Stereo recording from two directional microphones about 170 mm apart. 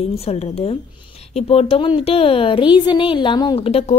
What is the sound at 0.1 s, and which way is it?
A woman's voice, 35° left (ahead or behind).